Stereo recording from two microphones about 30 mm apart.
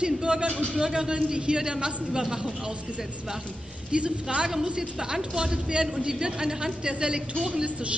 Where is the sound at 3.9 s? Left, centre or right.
Right.